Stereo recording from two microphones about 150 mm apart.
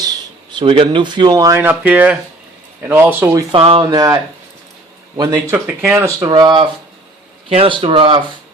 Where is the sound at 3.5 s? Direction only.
35° right (ahead or behind).